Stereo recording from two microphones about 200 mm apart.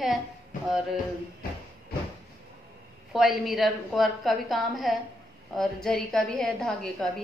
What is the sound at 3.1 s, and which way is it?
Speech, centre (ahead or behind).